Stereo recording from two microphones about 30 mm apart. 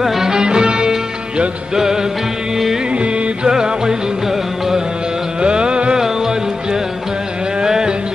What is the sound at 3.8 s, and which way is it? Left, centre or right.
Music, centre.